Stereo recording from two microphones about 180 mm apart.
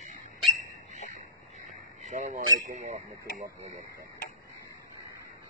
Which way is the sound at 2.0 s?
45° right (ahead or behind).